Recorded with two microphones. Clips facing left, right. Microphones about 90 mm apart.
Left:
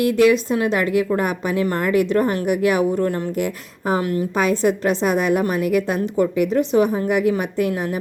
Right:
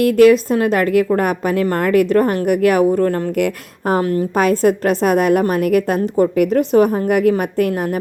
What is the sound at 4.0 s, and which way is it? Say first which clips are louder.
Speech: right 4 dB; 35° right (ahead or behind).